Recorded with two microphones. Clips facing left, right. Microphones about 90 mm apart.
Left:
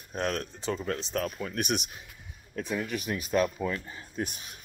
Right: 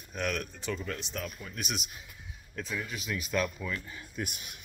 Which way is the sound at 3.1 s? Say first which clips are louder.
Left 4 dB; 40° left (ahead or behind).